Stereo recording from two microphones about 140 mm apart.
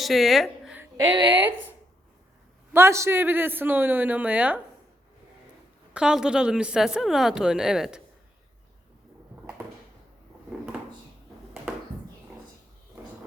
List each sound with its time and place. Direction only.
0.0 s a woman's voice: centre (ahead or behind)
0.9 s speech: 35° right (ahead or behind)
2.7 s a man's voice: 20° right (ahead or behind)
5.9 s speech: 5° right (ahead or behind)